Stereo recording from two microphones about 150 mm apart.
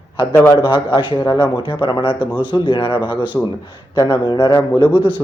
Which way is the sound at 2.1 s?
10° right (ahead or behind).